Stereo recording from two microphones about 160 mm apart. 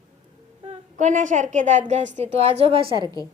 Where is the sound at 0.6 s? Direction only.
45° right (ahead or behind).